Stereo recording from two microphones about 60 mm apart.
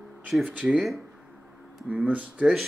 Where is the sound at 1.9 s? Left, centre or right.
Right.